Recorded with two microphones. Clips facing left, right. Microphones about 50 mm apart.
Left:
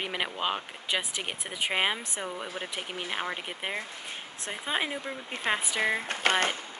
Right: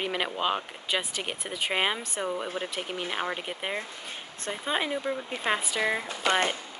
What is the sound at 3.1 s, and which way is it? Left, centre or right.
Speech, centre.